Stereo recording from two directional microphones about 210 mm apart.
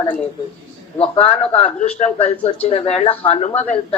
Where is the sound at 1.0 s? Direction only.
30° left (ahead or behind).